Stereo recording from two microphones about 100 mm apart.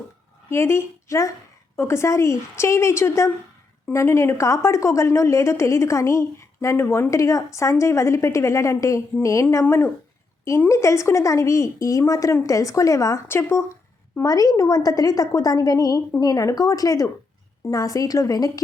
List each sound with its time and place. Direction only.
0.5 s a woman's voice: 25° left (ahead or behind)
14.2 s a woman's voice: 35° left (ahead or behind)